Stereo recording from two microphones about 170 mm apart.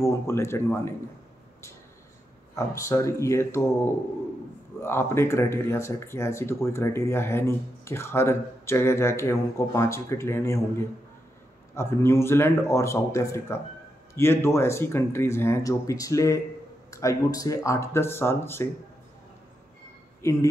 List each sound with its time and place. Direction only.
0.0 s speech: 15° left (ahead or behind)
2.5 s speech: 20° left (ahead or behind)
4.8 s speech: 15° left (ahead or behind)
11.7 s speech: 15° left (ahead or behind)
20.2 s speech: 15° left (ahead or behind)